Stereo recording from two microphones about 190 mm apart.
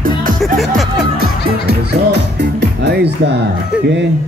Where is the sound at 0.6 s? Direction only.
Centre (ahead or behind).